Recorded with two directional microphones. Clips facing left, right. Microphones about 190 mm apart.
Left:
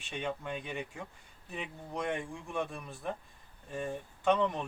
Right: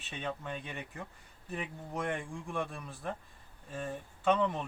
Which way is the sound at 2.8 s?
20° left (ahead or behind).